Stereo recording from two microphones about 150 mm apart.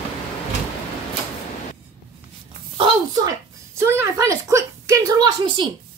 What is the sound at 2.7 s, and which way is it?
Speech, 35° right (ahead or behind).